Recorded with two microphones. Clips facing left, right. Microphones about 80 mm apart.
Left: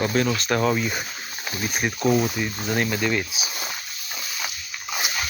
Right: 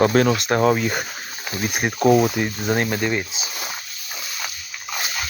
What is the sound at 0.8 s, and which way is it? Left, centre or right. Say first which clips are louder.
Speech: right 4 dB; right.